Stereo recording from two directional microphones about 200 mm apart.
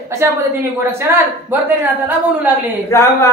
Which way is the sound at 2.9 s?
15° left (ahead or behind).